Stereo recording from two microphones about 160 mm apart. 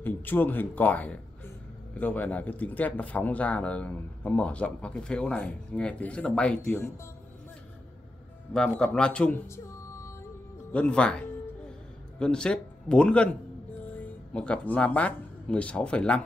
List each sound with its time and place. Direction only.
0.0 s speech: 10° left (ahead or behind)
8.5 s speech: 5° left (ahead or behind)
9.7 s music: 20° left (ahead or behind)
10.7 s speech: 5° left (ahead or behind)